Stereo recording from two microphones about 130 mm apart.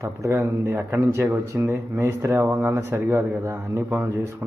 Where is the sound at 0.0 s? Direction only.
20° right (ahead or behind).